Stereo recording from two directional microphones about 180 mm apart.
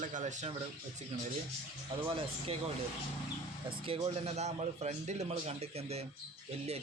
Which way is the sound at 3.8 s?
30° right (ahead or behind).